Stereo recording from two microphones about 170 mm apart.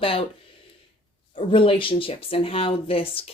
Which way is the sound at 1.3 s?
30° left (ahead or behind).